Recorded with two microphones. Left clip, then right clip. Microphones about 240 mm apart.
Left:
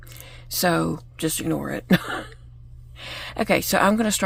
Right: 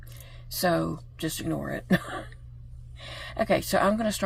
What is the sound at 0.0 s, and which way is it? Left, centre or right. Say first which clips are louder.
Speech: left 7 dB; left.